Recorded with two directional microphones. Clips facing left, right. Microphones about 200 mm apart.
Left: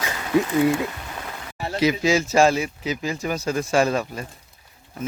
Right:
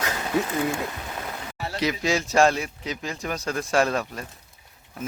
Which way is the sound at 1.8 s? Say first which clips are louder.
Left 5 dB; centre (ahead or behind).